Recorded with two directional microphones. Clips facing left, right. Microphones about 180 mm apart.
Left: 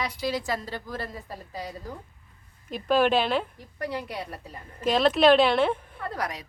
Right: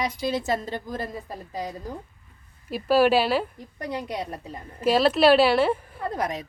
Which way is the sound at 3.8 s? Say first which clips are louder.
Right 2 dB; 20° right (ahead or behind).